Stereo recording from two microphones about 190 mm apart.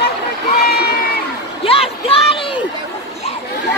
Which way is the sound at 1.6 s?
30° left (ahead or behind).